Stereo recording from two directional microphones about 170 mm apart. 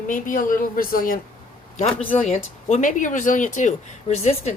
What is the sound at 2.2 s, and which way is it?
Speech, 40° left (ahead or behind).